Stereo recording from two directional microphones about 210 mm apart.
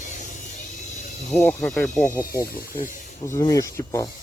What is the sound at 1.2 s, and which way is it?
Speech, centre (ahead or behind).